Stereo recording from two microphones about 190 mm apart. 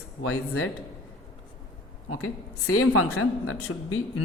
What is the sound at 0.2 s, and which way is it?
Speech, 90° left.